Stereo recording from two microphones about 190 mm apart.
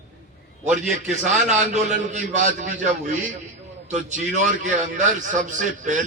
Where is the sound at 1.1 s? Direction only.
40° right (ahead or behind).